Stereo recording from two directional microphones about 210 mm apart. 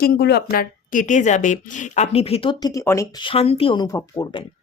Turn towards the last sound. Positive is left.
turn(degrees=20)  # may be behind; listen again after turning